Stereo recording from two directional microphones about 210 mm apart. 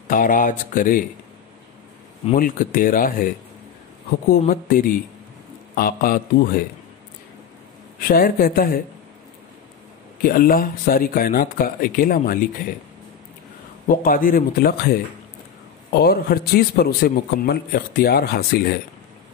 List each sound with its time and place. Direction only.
0.1 s speech: 40° left (ahead or behind)
2.3 s a man's voice: 40° left (ahead or behind)
8.0 s a man's voice: 45° left (ahead or behind)
10.2 s a man's voice: 45° left (ahead or behind)
13.8 s a man's voice: 40° left (ahead or behind)